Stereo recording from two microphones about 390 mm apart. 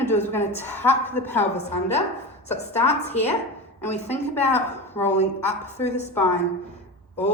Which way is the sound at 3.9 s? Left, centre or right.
Centre.